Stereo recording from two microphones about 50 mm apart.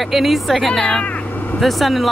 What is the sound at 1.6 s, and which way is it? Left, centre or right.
Speech, centre.